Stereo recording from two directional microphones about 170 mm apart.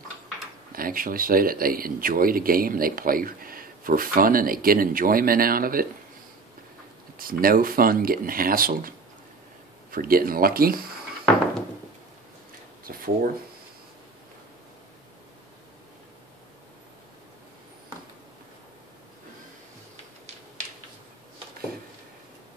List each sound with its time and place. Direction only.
0.7 s speech: 55° right (ahead or behind)
7.2 s speech: 60° right (ahead or behind)
12.8 s a sound: 60° right (ahead or behind)